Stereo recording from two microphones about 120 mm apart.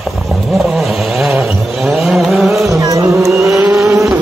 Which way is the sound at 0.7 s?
Centre (ahead or behind).